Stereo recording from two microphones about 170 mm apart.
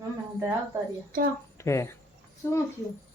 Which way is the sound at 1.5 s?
15° left (ahead or behind).